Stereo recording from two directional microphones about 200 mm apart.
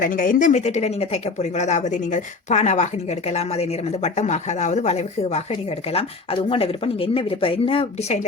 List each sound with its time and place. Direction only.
0.0 s speech: 40° left (ahead or behind)